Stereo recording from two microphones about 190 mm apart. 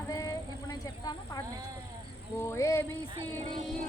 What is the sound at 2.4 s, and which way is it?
Speech, 15° left (ahead or behind).